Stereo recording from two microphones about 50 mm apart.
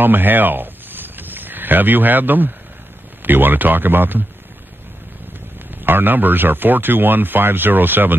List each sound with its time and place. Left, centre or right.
0.0 s a sound: right
3.3 s speech: right
5.9 s speech: right